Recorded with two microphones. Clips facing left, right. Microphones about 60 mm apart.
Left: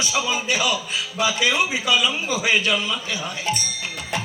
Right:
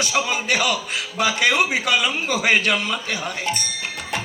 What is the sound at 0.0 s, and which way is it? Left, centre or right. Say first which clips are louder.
A man's voice: right 1 dB; right.